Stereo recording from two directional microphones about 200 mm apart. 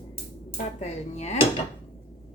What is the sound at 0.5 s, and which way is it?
Speech, 35° left (ahead or behind).